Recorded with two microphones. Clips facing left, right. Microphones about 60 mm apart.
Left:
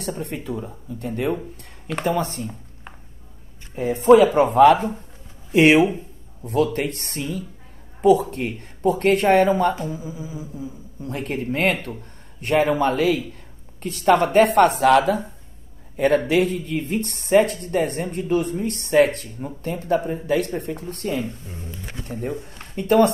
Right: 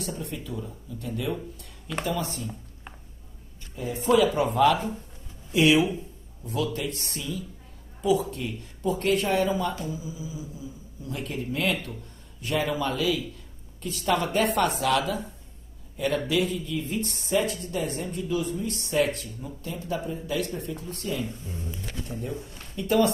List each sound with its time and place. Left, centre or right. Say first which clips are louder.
0.0 s speech: left 5 dB; left
3.7 s speech: left 9 dB; left